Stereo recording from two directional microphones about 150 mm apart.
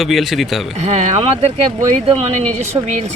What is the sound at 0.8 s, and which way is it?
Speech, 50° right (ahead or behind).